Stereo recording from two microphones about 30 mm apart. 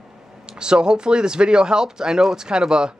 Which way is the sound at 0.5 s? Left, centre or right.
Right.